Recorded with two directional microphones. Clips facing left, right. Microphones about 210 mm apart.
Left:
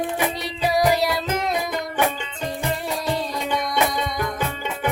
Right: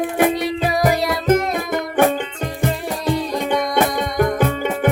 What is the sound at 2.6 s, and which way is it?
Music, 50° right (ahead or behind).